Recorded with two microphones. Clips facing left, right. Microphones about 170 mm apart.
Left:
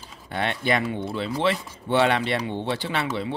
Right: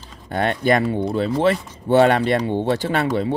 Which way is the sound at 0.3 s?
45° right (ahead or behind).